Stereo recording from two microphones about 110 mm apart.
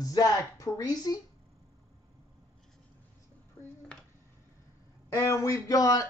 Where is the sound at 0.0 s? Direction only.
30° left (ahead or behind).